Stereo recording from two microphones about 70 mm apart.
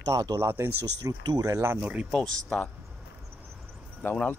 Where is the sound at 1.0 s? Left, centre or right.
Right.